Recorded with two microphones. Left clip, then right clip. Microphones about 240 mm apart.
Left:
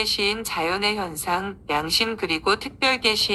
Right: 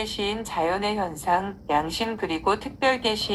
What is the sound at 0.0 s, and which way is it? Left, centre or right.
A woman's voice, left.